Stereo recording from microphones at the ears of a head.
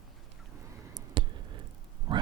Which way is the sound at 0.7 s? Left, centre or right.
Right.